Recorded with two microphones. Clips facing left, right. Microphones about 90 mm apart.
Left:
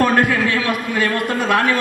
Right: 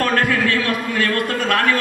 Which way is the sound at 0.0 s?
20° left (ahead or behind).